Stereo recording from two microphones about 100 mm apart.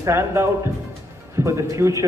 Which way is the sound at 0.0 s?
25° right (ahead or behind).